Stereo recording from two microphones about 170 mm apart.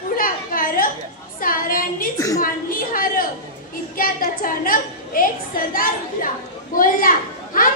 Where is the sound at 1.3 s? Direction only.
55° left (ahead or behind).